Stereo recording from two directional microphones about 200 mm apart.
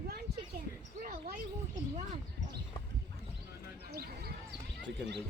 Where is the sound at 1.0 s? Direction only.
45° right (ahead or behind).